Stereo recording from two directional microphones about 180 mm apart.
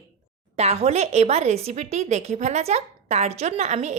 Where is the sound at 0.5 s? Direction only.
35° right (ahead or behind).